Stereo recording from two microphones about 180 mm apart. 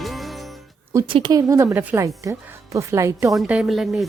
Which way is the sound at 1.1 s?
20° right (ahead or behind).